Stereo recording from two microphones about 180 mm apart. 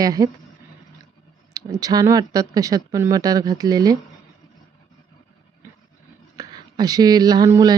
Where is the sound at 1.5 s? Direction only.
20° right (ahead or behind).